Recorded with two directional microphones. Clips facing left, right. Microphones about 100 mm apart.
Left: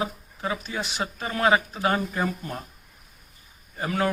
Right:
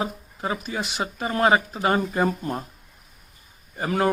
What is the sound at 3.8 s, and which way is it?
Speech, 30° right (ahead or behind).